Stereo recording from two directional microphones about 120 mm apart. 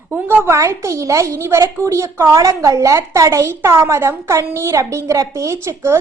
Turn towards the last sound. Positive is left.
turn(degrees=-20)  # may be behind; listen again after turning